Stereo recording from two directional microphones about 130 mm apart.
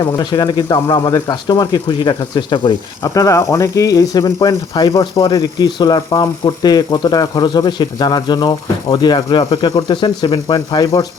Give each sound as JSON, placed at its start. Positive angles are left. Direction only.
{"t": 0.0, "sound": "speech", "side_deg": 30}